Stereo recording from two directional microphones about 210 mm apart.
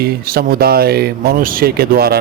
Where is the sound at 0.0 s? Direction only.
45° right (ahead or behind).